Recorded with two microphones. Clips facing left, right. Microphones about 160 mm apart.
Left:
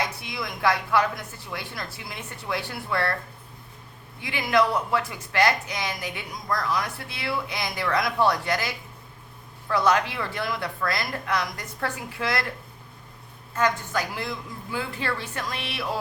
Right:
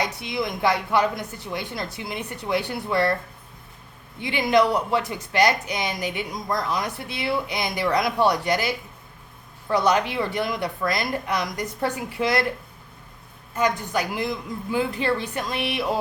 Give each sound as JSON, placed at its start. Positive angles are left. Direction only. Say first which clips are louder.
{"t": 0.0, "sound": "speech", "louder": "right 4 dB", "side_deg": -20}
{"t": 4.2, "sound": "speech", "louder": "right 3 dB", "side_deg": -20}
{"t": 13.6, "sound": "a woman's voice", "louder": "right 2 dB", "side_deg": -15}